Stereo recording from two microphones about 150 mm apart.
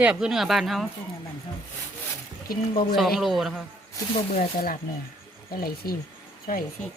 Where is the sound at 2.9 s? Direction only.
Centre (ahead or behind).